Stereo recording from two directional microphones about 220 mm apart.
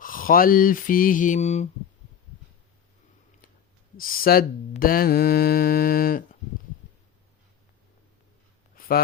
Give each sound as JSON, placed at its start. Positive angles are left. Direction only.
{"t": 0.0, "sound": "mantra", "side_deg": 40}
{"t": 3.9, "sound": "mantra", "side_deg": 40}
{"t": 8.7, "sound": "a sound", "side_deg": 40}